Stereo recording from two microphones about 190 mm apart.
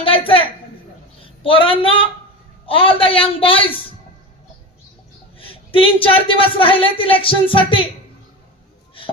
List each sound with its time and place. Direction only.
0.0 s a woman's voice: 30° left (ahead or behind)
1.2 s a sound: 30° left (ahead or behind)
2.6 s speech: 30° left (ahead or behind)
5.4 s speech: 30° left (ahead or behind)